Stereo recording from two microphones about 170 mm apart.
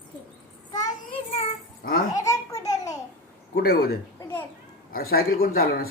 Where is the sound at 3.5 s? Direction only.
65° left (ahead or behind).